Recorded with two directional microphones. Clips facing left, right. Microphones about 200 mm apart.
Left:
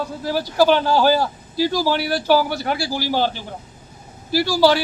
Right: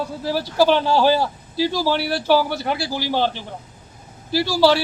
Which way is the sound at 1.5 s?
30° right (ahead or behind).